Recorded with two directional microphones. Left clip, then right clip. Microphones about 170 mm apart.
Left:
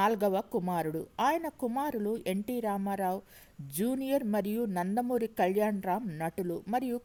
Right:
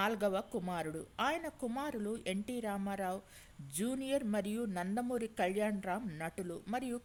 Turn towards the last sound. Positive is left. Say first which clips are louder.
# left 7 dB
turn(degrees=30)  # may be behind; listen again after turning